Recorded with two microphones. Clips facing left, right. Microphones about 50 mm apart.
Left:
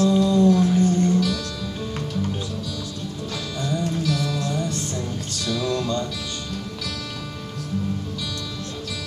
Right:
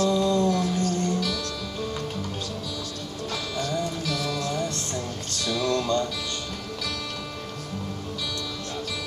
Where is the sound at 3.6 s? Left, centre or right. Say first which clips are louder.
Left 2 dB; centre.